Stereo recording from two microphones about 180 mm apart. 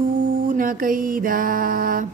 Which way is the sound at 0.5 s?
50° right (ahead or behind).